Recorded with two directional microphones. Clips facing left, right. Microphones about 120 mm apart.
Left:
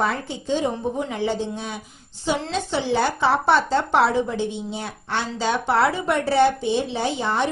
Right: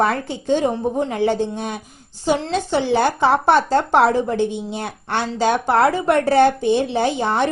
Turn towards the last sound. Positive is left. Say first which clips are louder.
# right 4 dB
turn(degrees=-55)  # may be behind; listen again after turning